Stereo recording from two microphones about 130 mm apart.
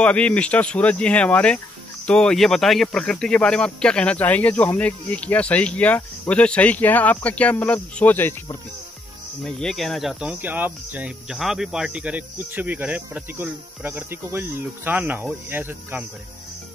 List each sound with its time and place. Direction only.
0.0 s speech: 10° left (ahead or behind)
9.4 s speech: 5° left (ahead or behind)
10.4 s speech: 15° right (ahead or behind)